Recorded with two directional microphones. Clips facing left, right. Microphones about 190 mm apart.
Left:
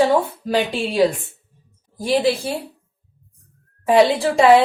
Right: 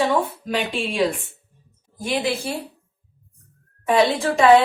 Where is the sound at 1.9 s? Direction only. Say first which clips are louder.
Left 5 dB; 35° left (ahead or behind).